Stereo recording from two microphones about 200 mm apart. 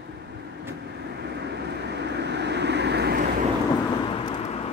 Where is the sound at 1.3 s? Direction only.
55° right (ahead or behind).